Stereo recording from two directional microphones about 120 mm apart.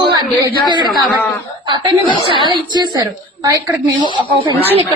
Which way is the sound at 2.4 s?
40° right (ahead or behind).